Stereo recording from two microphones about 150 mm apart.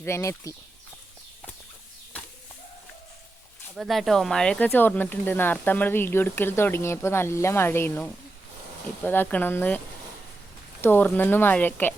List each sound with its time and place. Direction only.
0.0 s speech: 20° left (ahead or behind)
3.8 s speech: centre (ahead or behind)